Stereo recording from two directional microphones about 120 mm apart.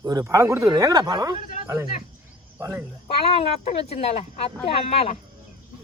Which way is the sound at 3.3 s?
55° left (ahead or behind).